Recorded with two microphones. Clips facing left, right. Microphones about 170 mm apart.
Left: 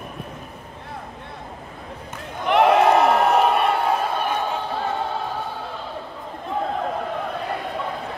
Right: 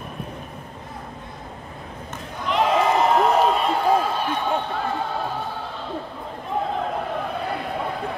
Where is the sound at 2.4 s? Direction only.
65° left (ahead or behind).